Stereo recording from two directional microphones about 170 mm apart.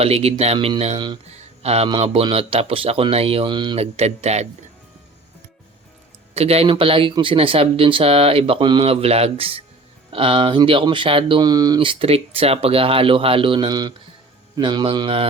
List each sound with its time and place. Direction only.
0.0 s speech: 35° right (ahead or behind)
6.3 s speech: 35° right (ahead or behind)